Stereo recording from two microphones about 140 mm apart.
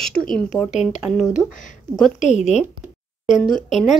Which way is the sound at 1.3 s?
65° left (ahead or behind).